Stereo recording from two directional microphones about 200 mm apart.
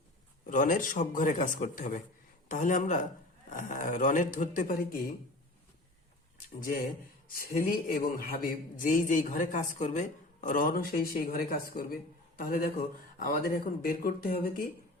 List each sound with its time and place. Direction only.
0.4 s speech: 40° left (ahead or behind)
7.3 s speech: 45° left (ahead or behind)